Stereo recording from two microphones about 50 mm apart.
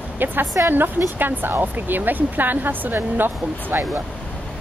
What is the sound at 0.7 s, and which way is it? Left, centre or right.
Speech, right.